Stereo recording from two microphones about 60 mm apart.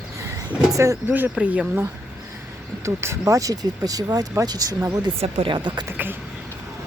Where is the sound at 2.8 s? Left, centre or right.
Right.